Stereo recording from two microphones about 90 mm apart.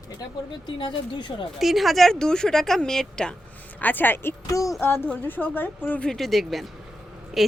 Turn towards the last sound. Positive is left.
turn(degrees=-5)  # may be behind; listen again after turning